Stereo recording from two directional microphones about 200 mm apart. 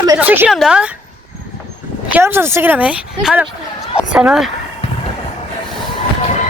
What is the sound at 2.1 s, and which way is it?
A woman's voice, 10° right (ahead or behind).